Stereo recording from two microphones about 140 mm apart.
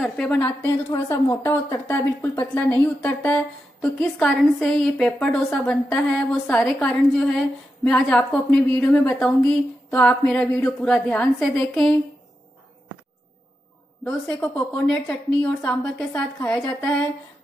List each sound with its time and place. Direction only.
0.0 s a woman's voice: 10° left (ahead or behind)
14.0 s a woman's voice: 10° left (ahead or behind)
16.1 s a woman's voice: 15° left (ahead or behind)